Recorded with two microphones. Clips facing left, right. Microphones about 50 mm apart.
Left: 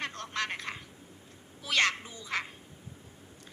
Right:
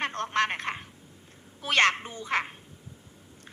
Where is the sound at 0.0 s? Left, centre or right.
Right.